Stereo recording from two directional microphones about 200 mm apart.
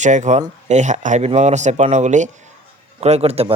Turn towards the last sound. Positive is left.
turn(degrees=-30)  # may be behind; listen again after turning